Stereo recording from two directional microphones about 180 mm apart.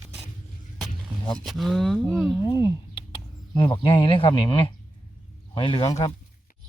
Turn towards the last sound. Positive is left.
turn(degrees=30)  # may be behind; listen again after turning